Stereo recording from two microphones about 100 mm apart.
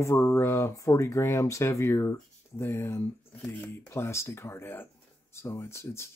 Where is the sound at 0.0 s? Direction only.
30° left (ahead or behind).